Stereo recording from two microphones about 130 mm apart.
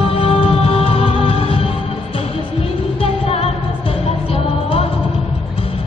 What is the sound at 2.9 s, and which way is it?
Music, 50° left (ahead or behind).